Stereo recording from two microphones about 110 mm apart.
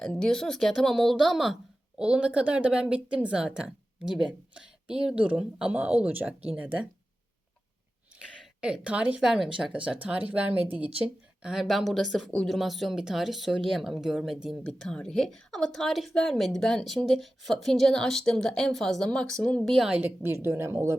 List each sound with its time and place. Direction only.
0.0 s speech: 5° left (ahead or behind); by 6.8 s 15° right (ahead or behind)
8.1 s speech: 10° right (ahead or behind)
20.2 s speech: 20° right (ahead or behind)